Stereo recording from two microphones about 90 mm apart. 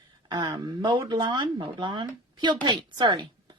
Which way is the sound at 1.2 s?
65° right (ahead or behind).